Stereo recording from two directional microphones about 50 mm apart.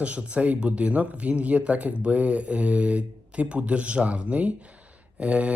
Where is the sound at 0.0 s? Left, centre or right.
Right.